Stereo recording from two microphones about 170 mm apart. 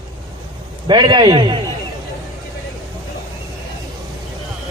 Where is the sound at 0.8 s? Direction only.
25° right (ahead or behind).